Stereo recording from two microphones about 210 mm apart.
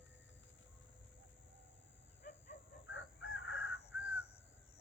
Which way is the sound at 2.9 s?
65° left (ahead or behind).